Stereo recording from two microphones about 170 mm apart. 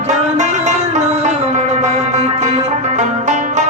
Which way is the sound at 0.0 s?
45° right (ahead or behind).